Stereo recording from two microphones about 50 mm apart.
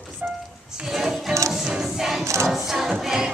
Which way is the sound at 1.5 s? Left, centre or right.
Centre.